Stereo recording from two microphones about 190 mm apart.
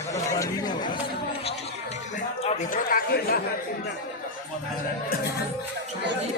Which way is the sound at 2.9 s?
50° left (ahead or behind).